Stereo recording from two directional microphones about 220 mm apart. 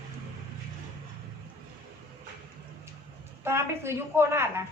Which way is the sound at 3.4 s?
10° right (ahead or behind).